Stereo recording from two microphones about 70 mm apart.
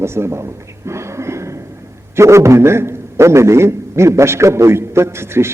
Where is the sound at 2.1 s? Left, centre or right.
Right.